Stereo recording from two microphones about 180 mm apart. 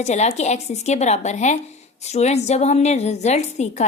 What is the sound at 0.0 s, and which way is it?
A woman's voice, 40° left (ahead or behind).